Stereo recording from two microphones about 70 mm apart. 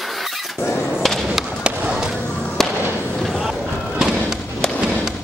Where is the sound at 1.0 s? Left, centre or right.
Centre.